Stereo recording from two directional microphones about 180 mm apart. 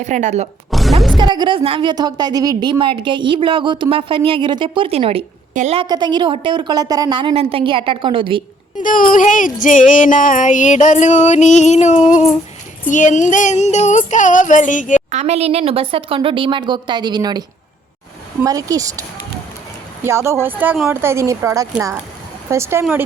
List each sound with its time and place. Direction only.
0.0 s speech: 40° right (ahead or behind)
0.7 s music: centre (ahead or behind)
1.1 s a woman's voice: 25° right (ahead or behind)
8.8 s speech: 50° left (ahead or behind)
15.1 s a woman's voice: 40° right (ahead or behind); by 17.4 s 25° right (ahead or behind)
18.4 s a woman's voice: 20° right (ahead or behind)
20.1 s speech: 15° right (ahead or behind)